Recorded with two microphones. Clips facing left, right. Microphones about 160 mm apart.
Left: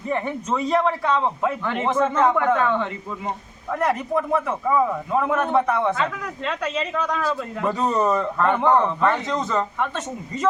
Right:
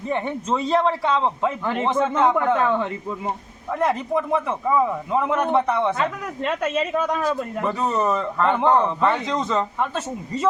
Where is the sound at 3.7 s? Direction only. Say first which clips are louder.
Even; centre (ahead or behind).